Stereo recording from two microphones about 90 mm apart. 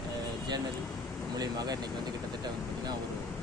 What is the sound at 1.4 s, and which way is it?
Speech, 50° right (ahead or behind).